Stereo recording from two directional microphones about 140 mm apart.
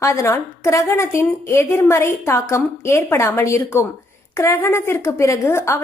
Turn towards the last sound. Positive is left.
turn(degrees=20)  # may be behind; listen again after turning